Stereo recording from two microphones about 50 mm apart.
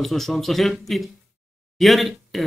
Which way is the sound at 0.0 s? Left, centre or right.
Centre.